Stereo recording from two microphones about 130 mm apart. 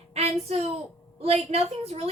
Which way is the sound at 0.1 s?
55° right (ahead or behind).